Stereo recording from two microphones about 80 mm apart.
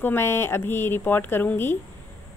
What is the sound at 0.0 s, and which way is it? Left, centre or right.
A woman's voice, left.